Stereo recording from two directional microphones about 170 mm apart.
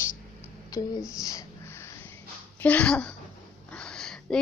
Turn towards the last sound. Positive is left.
turn(degrees=5)  # may be behind; listen again after turning